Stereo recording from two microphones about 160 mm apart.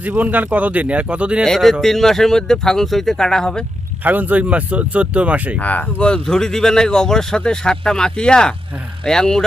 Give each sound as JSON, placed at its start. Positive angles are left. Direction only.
{"t": 0.0, "sound": "speech", "side_deg": -10}
{"t": 4.0, "sound": "speech", "side_deg": -10}
{"t": 5.5, "sound": "speech", "side_deg": 10}